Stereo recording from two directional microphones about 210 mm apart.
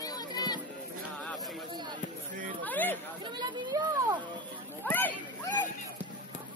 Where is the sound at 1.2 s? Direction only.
5° left (ahead or behind).